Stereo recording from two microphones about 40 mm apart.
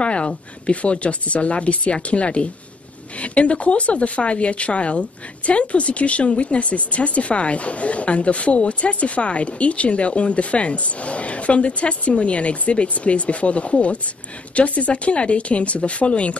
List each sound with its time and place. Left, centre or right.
0.0 s speech: left